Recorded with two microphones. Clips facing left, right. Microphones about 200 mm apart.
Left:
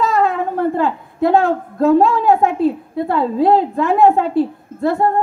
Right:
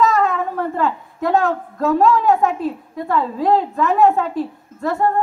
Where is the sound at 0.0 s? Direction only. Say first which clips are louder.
Left 1 dB; 35° left (ahead or behind).